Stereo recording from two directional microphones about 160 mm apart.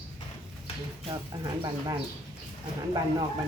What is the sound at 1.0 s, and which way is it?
Speech, 25° right (ahead or behind).